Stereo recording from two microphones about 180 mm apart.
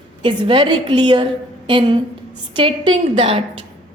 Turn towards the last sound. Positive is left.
turn(degrees=-30)  # may be behind; listen again after turning